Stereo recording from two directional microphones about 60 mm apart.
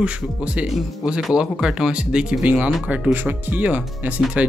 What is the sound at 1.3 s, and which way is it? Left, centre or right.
Speech, centre.